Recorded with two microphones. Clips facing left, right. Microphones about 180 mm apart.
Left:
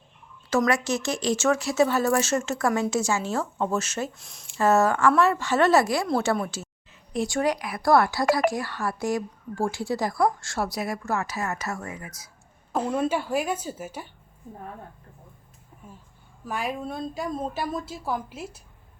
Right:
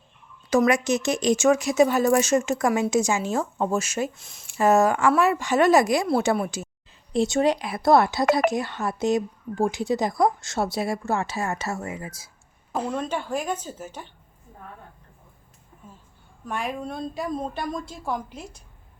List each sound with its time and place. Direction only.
0.5 s speech: 15° right (ahead or behind)
4.2 s a woman's voice: centre (ahead or behind)
4.5 s speech: 15° right (ahead or behind)
7.1 s speech: 25° right (ahead or behind)
12.7 s a woman's voice: 5° left (ahead or behind)
16.5 s a woman's voice: centre (ahead or behind)